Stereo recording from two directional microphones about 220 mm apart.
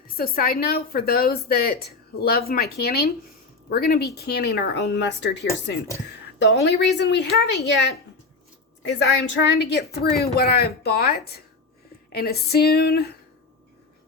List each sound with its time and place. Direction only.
0.2 s speech: 45° left (ahead or behind)
8.8 s speech: 55° left (ahead or behind)